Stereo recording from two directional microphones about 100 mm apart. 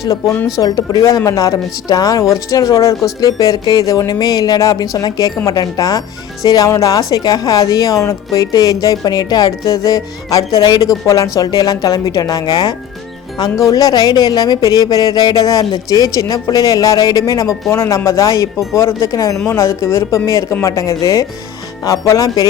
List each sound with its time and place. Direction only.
0.0 s a woman's voice: 35° left (ahead or behind)